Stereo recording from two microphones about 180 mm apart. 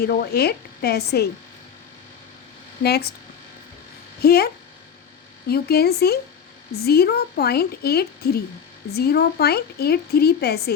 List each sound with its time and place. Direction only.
0.0 s speech: 60° left (ahead or behind)
2.8 s speech: 65° left (ahead or behind)
4.2 s speech: 60° left (ahead or behind)